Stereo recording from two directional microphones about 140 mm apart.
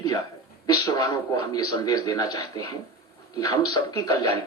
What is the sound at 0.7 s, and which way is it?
A man's voice, 25° left (ahead or behind).